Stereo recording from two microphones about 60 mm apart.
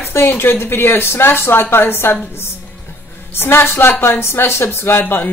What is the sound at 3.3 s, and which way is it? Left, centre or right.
Speech, left.